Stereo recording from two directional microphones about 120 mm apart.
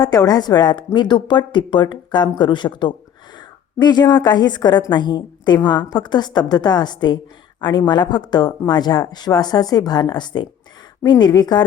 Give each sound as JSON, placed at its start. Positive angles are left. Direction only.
{"t": 0.0, "sound": "a woman's voice", "side_deg": 35}